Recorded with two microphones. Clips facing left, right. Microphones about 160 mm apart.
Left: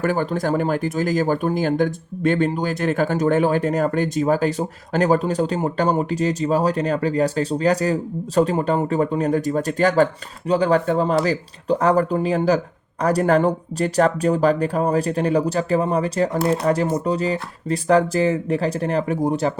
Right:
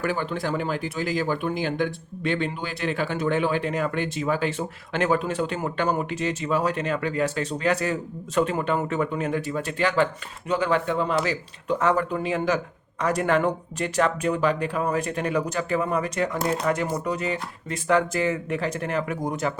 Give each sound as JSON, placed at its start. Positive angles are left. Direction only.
{"t": 0.0, "sound": "speech", "side_deg": 45}